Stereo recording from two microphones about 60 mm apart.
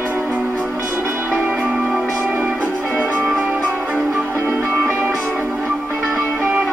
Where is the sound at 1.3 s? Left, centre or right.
Right.